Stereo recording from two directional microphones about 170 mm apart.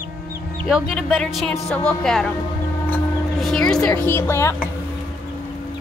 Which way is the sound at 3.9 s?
15° left (ahead or behind).